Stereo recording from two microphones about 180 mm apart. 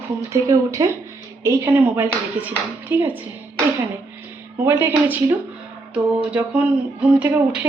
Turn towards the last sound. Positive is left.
turn(degrees=-10)  # may be behind; listen again after turning